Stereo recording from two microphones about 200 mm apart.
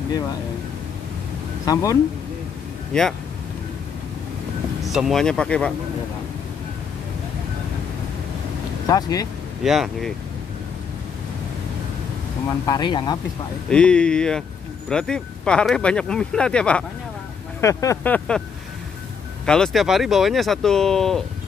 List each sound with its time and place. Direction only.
1.7 s speech: 15° left (ahead or behind)
2.9 s speech: centre (ahead or behind)
4.8 s speech: centre (ahead or behind)
8.8 s speech: 20° left (ahead or behind)
9.6 s speech: centre (ahead or behind)
12.6 s speech: 20° left (ahead or behind)
13.7 s speech: 5° left (ahead or behind)
19.4 s speech: 5° left (ahead or behind)